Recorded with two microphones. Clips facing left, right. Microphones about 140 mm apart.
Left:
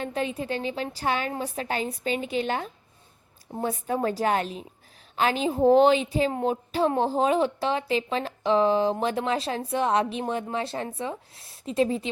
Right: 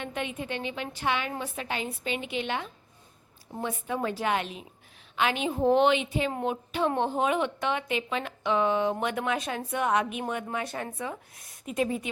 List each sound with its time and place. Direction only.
0.0 s a woman's voice: 35° left (ahead or behind)